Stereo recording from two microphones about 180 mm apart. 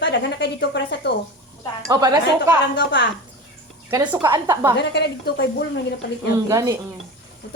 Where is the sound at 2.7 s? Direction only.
75° left (ahead or behind).